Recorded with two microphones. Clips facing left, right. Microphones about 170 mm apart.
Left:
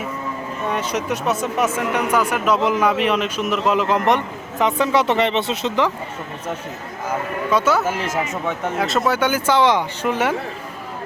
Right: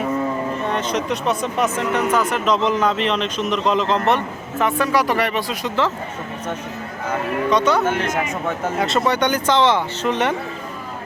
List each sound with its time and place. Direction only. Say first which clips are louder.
0.7 s speech: left 2 dB; 10° left (ahead or behind)
7.5 s speech: even; 5° left (ahead or behind)